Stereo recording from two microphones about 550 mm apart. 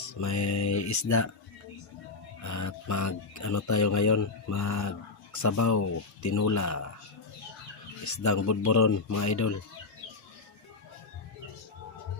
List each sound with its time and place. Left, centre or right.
0.1 s speech: left
2.4 s speech: left
8.0 s speech: left